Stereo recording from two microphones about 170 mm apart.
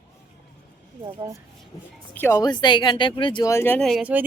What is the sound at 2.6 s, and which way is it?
Speech, 25° left (ahead or behind).